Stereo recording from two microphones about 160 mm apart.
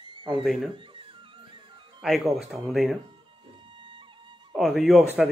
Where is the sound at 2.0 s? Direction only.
Centre (ahead or behind).